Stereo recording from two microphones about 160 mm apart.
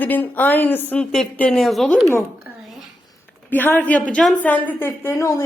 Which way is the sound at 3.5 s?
10° left (ahead or behind).